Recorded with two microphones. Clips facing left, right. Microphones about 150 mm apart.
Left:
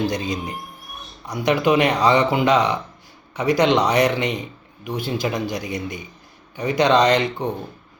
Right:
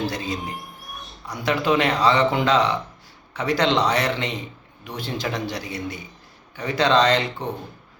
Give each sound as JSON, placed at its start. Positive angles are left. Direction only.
{"t": 0.0, "sound": "speech", "side_deg": 15}